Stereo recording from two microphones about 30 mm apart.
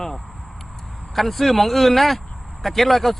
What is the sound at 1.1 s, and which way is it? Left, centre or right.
Speech, centre.